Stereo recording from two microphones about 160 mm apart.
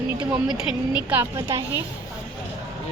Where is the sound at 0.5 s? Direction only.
35° left (ahead or behind).